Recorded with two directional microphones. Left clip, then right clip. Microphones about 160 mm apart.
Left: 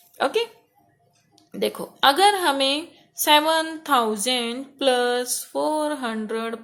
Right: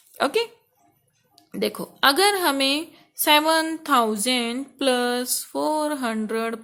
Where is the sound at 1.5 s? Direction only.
30° right (ahead or behind).